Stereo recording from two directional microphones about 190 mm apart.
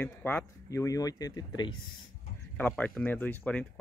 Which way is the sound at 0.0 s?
10° left (ahead or behind).